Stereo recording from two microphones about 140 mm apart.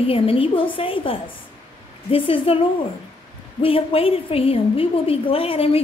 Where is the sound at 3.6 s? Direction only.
40° left (ahead or behind).